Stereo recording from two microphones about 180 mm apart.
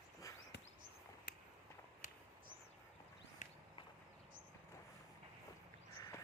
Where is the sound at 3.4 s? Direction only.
45° left (ahead or behind).